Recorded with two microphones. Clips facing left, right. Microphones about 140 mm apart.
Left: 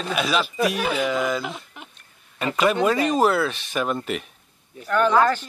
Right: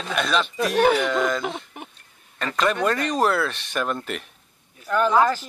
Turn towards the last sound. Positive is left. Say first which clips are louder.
# left 1 dB
turn(degrees=-5)  # may be behind; listen again after turning